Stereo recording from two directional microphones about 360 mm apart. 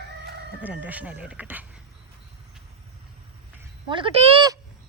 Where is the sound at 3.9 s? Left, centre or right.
Centre.